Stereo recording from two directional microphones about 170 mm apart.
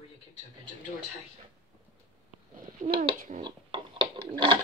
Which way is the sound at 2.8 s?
45° right (ahead or behind).